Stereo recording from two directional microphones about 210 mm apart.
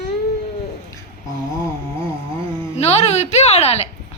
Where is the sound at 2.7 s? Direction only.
30° left (ahead or behind).